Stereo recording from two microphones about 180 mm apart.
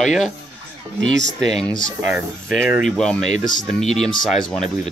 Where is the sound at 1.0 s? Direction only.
80° right.